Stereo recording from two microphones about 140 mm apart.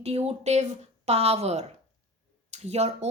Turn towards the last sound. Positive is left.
turn(degrees=-50)  # may be behind; listen again after turning